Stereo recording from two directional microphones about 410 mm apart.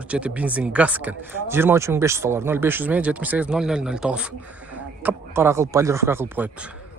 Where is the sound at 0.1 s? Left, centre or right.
Centre.